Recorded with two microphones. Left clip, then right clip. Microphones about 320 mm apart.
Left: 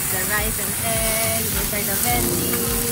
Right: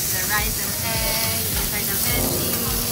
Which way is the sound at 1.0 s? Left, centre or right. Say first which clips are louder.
Left 1 dB; centre.